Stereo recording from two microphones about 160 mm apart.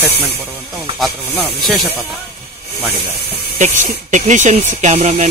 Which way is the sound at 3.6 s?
50° right (ahead or behind).